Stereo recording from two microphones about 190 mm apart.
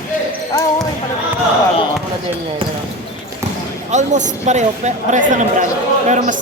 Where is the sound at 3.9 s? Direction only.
40° right (ahead or behind).